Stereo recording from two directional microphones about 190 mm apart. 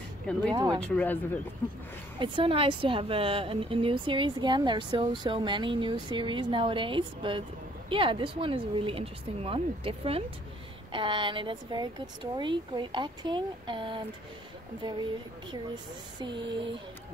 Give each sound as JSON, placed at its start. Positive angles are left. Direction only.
{"t": 0.5, "sound": "a woman's voice", "side_deg": -20}
{"t": 0.7, "sound": "speech", "side_deg": 5}
{"t": 2.1, "sound": "a woman's voice", "side_deg": -25}
{"t": 15.5, "sound": "a woman's voice", "side_deg": -25}